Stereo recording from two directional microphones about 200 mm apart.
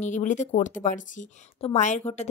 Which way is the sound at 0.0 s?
40° left (ahead or behind).